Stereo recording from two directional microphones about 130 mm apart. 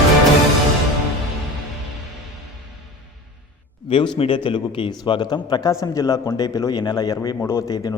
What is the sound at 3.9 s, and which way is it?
A man's voice, 40° left (ahead or behind).